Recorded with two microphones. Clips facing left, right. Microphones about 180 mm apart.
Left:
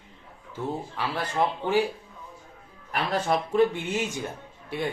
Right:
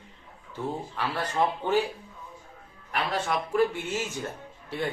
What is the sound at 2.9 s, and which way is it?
Speech, 30° left (ahead or behind).